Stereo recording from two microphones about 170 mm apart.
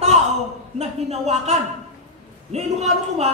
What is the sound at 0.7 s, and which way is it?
A man's voice, 40° right (ahead or behind).